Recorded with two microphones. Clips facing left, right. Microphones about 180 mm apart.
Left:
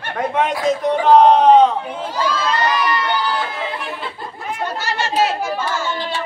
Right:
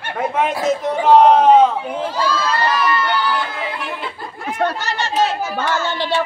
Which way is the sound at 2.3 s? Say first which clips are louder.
Left 2 dB; 15° left (ahead or behind).